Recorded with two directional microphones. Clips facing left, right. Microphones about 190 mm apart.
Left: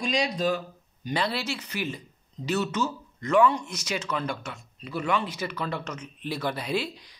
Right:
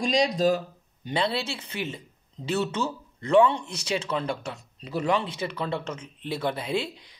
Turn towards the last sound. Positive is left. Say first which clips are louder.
# even
turn(degrees=-25)  # may be behind; listen again after turning